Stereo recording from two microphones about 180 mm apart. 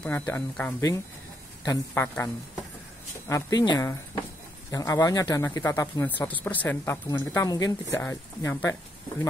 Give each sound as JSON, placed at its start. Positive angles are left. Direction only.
{"t": 0.0, "sound": "speech", "side_deg": 10}